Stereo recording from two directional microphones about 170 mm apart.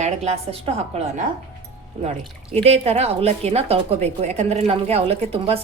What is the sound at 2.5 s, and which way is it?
Speech, 40° right (ahead or behind).